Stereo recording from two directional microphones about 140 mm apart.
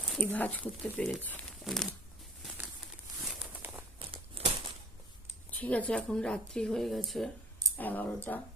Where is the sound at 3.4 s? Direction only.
15° right (ahead or behind).